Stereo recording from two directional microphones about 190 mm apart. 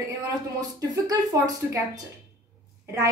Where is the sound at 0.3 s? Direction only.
20° right (ahead or behind).